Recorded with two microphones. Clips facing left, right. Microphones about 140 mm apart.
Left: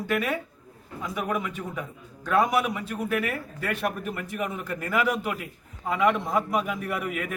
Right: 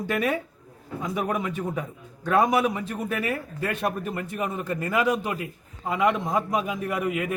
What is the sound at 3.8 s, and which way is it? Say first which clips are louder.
A man's voice: right 2 dB; 30° right (ahead or behind).